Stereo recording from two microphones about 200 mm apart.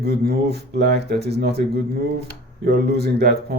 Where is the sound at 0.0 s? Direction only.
50° right (ahead or behind).